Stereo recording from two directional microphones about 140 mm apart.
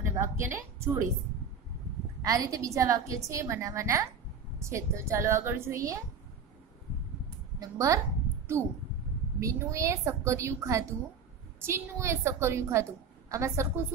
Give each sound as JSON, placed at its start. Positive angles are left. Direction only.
{"t": 0.0, "sound": "a woman's voice", "side_deg": -20}
{"t": 2.2, "sound": "a woman's voice", "side_deg": -25}
{"t": 7.6, "sound": "a woman's voice", "side_deg": -25}